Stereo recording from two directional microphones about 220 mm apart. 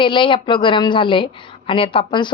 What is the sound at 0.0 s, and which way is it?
A woman's voice, 20° left (ahead or behind).